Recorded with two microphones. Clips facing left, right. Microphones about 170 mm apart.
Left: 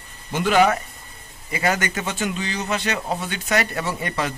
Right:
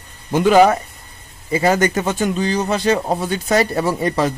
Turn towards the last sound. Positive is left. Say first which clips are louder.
# right 8 dB
turn(degrees=-35)  # may be behind; listen again after turning